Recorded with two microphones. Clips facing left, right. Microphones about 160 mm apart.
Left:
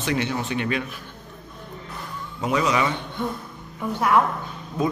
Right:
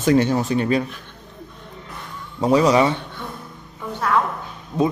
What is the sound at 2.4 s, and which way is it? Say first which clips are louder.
Speech: right 7 dB; 35° right (ahead or behind).